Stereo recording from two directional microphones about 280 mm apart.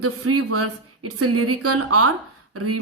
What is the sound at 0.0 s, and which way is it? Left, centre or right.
Speech, right.